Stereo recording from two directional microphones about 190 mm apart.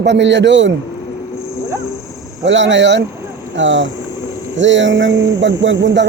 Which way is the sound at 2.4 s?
75° right (ahead or behind).